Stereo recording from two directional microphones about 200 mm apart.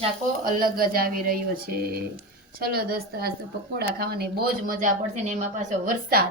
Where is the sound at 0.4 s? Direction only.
45° right (ahead or behind).